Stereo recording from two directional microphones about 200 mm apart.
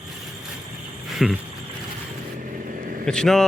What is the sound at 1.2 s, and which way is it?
Speech, centre (ahead or behind).